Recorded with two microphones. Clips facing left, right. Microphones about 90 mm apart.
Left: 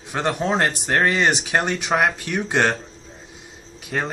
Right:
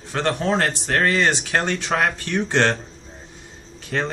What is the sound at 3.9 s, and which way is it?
Speech, 10° left (ahead or behind).